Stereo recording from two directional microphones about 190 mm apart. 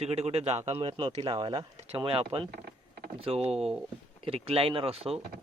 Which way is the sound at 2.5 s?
50° right (ahead or behind).